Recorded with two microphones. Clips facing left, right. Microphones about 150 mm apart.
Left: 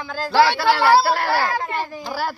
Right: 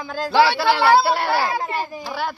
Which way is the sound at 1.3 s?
15° right (ahead or behind).